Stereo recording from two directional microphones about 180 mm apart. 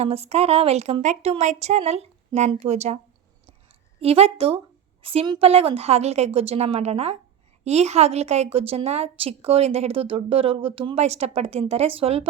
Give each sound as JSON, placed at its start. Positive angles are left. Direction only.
{"t": 0.0, "sound": "a woman's voice", "side_deg": -35}
{"t": 4.0, "sound": "a woman's voice", "side_deg": -35}